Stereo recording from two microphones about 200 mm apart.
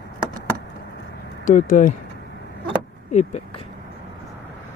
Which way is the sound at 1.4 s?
40° left (ahead or behind).